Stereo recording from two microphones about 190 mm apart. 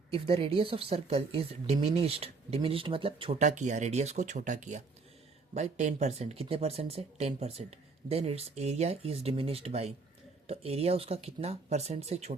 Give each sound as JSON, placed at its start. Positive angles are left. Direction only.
{"t": 0.1, "sound": "speech", "side_deg": -30}